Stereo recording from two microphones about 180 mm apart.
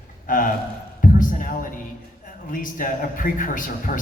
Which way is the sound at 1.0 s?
50° left (ahead or behind).